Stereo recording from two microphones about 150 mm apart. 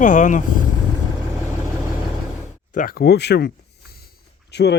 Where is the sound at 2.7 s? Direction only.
85° left.